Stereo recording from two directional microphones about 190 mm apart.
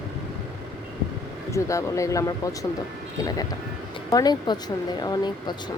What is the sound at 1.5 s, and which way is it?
Speech, 15° left (ahead or behind).